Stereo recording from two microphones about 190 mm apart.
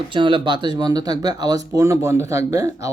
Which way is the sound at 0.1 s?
25° right (ahead or behind).